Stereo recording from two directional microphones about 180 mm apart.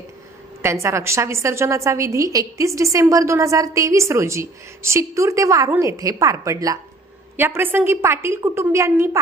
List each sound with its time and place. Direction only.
0.6 s a woman's voice: 15° right (ahead or behind)